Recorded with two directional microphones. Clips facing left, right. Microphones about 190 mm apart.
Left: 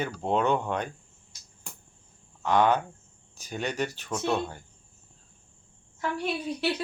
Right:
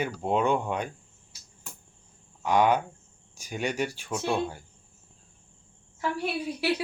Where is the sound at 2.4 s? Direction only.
10° right (ahead or behind).